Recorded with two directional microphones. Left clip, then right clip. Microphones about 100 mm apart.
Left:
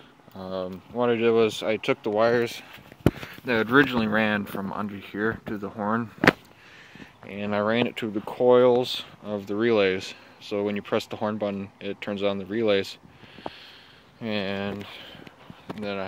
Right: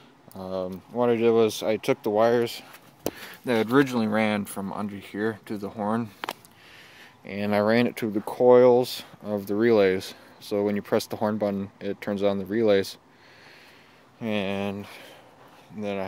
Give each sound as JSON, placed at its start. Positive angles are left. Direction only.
{"t": 0.4, "sound": "speech", "side_deg": -35}
{"t": 3.6, "sound": "speech", "side_deg": -30}
{"t": 7.2, "sound": "speech", "side_deg": -70}
{"t": 8.3, "sound": "speech", "side_deg": -35}
{"t": 14.2, "sound": "speech", "side_deg": -35}